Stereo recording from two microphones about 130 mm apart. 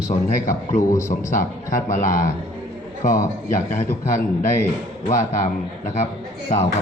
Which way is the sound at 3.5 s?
80° left.